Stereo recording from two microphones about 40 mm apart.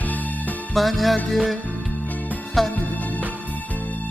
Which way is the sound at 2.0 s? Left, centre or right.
Left.